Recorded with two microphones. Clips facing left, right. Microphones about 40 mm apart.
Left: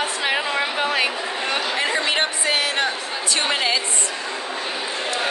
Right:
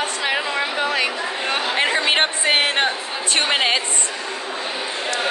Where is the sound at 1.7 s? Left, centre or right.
Right.